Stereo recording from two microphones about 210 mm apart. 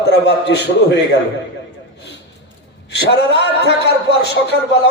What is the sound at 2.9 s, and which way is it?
Speech, 55° left (ahead or behind).